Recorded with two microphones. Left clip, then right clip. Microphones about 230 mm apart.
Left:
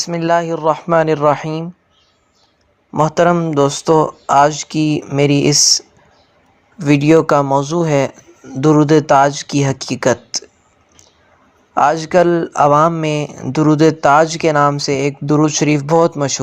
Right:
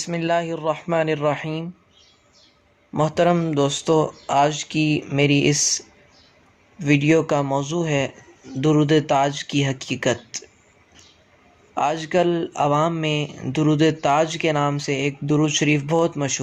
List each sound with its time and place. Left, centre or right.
0.0 s speech: centre
2.9 s speech: centre
11.7 s speech: left